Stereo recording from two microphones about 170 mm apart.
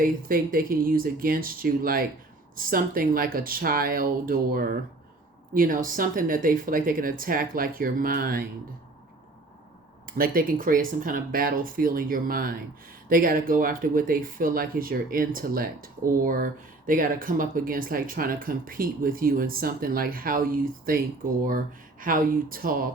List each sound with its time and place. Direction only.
0.0 s speech: 55° right (ahead or behind)
10.2 s speech: 55° right (ahead or behind)